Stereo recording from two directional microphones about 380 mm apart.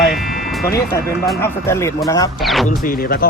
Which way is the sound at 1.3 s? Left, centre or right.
Centre.